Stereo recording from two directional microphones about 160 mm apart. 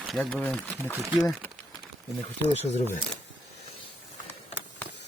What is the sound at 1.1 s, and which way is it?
Speech, 5° right (ahead or behind).